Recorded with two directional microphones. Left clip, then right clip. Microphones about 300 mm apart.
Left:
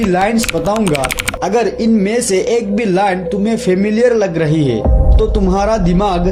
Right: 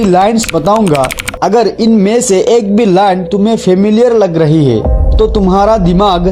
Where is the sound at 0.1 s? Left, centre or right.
Right.